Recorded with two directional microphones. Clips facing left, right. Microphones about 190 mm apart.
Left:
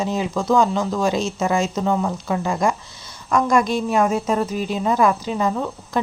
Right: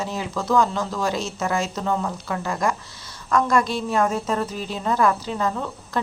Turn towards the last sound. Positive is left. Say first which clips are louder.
# left 3 dB
turn(degrees=15)  # may be behind; listen again after turning